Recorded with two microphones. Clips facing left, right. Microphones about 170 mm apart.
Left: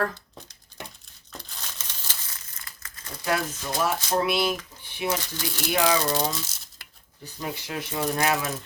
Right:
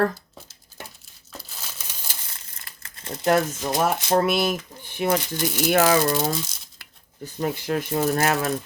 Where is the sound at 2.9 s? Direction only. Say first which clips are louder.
Right 8 dB; 25° right (ahead or behind).